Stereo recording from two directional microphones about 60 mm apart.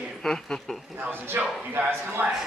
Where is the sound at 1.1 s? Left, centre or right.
Right.